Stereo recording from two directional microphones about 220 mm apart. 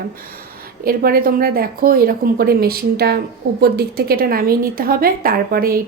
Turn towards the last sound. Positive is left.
turn(degrees=-45)  # may be behind; listen again after turning